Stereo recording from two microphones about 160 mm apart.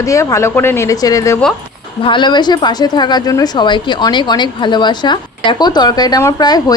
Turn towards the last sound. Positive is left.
turn(degrees=25)  # may be behind; listen again after turning